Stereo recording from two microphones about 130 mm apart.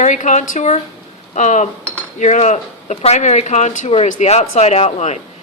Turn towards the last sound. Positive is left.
turn(degrees=60)  # may be behind; listen again after turning